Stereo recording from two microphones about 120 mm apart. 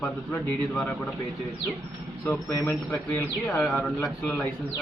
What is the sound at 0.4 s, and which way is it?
Speech, 10° left (ahead or behind).